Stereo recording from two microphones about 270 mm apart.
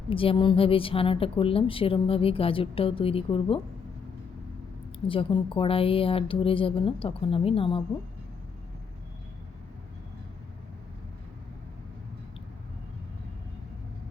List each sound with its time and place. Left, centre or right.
0.1 s a woman's voice: centre
5.0 s a woman's voice: centre